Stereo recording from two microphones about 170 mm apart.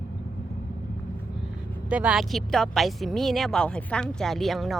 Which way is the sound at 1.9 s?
5° right (ahead or behind).